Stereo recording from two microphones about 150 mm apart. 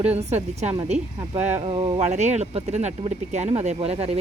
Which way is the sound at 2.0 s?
50° right (ahead or behind).